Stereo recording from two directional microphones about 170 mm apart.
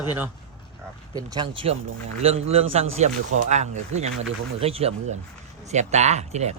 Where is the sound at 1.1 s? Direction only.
25° right (ahead or behind); by 6.5 s 40° right (ahead or behind).